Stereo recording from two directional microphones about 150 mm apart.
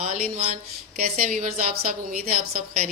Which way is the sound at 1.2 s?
70° right (ahead or behind).